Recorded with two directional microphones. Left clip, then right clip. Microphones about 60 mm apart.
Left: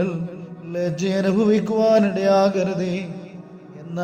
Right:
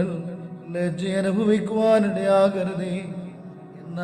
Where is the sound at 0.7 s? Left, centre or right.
Left.